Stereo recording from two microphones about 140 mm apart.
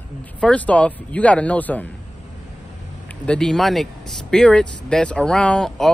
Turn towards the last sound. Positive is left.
turn(degrees=5)  # may be behind; listen again after turning